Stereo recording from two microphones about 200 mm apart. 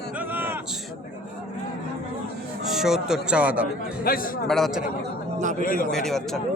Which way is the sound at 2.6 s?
Centre (ahead or behind).